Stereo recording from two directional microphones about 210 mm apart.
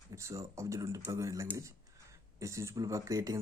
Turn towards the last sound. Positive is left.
turn(degrees=-15)  # may be behind; listen again after turning